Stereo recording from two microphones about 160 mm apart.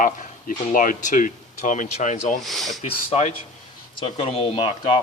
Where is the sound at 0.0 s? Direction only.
60° left (ahead or behind).